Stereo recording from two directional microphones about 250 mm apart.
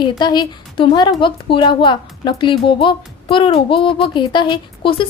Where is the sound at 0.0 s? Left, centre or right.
Centre.